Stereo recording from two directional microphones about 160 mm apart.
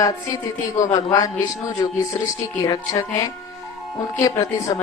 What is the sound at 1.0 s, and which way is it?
A woman's voice, 25° left (ahead or behind).